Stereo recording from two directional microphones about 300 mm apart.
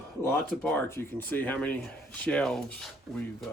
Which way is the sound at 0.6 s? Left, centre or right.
Centre.